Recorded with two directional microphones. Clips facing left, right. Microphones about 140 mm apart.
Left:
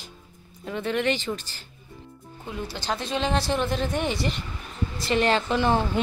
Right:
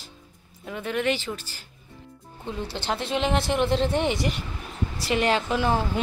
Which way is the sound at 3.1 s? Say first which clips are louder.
Right 1 dB; 20° right (ahead or behind).